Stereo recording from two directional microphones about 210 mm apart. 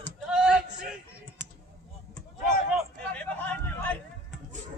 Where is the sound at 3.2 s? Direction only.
10° left (ahead or behind).